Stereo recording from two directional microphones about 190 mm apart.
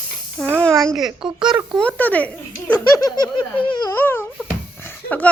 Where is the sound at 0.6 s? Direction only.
5° left (ahead or behind); by 3.9 s 25° left (ahead or behind).